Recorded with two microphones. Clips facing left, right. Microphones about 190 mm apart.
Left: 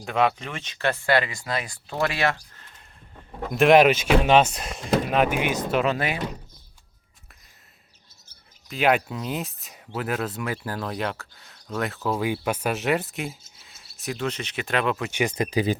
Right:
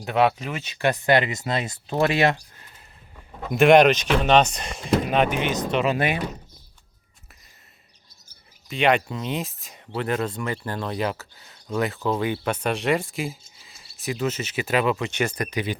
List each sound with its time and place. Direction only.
0.0 s speech: 5° right (ahead or behind)
3.5 s speech: centre (ahead or behind)
8.7 s speech: 5° left (ahead or behind)
15.1 s speech: 15° left (ahead or behind)
15.4 s speech: 30° left (ahead or behind)